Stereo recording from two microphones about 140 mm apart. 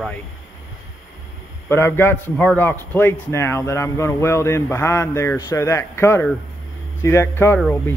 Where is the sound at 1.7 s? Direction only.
15° left (ahead or behind).